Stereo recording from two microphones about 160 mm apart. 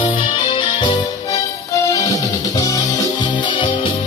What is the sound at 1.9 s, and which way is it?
Music, 20° left (ahead or behind).